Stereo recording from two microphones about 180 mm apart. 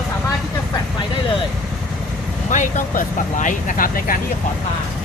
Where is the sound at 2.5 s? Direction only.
45° left (ahead or behind).